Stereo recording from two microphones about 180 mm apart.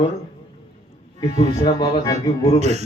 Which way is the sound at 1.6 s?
20° left (ahead or behind).